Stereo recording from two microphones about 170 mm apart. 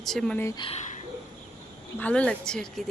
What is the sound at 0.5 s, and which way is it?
Speech, 35° left (ahead or behind).